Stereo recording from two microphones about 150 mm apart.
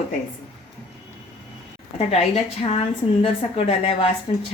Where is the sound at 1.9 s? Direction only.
45° left (ahead or behind).